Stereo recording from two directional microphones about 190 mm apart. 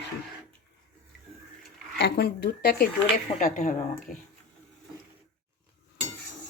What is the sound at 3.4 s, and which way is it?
Speech, 45° left (ahead or behind).